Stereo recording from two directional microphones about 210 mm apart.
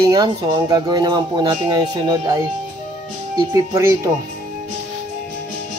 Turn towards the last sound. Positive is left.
turn(degrees=-15)  # may be behind; listen again after turning